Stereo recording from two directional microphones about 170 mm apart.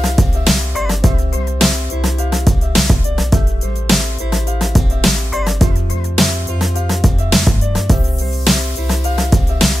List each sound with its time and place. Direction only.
0.0 s music: centre (ahead or behind)